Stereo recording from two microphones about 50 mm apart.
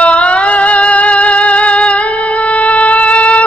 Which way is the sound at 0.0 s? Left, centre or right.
Left.